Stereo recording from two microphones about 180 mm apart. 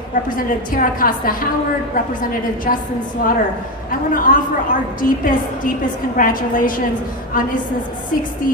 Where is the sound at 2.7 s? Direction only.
50° left (ahead or behind).